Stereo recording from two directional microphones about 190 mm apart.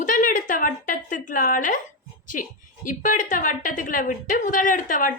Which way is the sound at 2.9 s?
45° left (ahead or behind).